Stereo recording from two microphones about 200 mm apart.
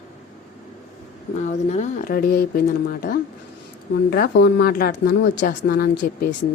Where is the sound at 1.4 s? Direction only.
35° left (ahead or behind).